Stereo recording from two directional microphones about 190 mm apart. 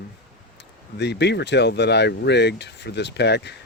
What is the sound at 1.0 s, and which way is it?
Speech, 65° left (ahead or behind).